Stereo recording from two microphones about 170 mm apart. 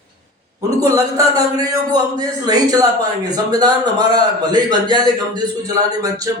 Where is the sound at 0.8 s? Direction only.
20° right (ahead or behind).